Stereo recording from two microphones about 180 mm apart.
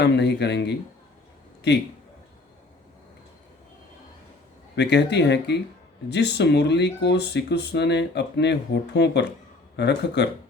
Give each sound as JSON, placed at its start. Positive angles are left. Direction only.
{"t": 0.0, "sound": "speech", "side_deg": 70}
{"t": 4.8, "sound": "speech", "side_deg": 70}